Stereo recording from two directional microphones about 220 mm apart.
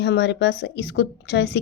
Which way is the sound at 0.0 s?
50° left (ahead or behind).